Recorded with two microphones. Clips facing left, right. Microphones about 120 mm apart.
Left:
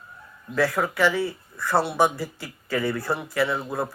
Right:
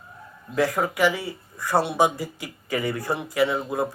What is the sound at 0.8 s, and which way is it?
Speech, 15° right (ahead or behind).